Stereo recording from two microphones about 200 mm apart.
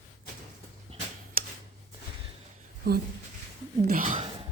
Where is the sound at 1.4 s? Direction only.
45° right (ahead or behind).